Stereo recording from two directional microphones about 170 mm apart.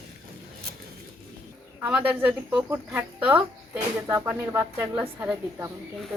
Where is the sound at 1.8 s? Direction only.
5° right (ahead or behind).